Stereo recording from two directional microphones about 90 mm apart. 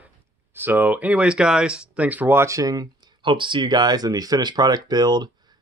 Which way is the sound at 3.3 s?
65° right (ahead or behind).